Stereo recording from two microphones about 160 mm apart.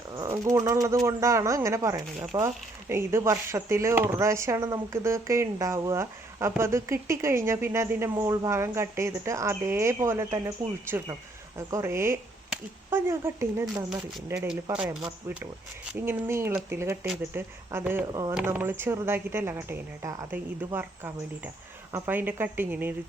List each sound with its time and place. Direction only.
0.1 s speech: 20° right (ahead or behind)
14.3 s speech: 5° right (ahead or behind)
15.9 s speech: 15° right (ahead or behind)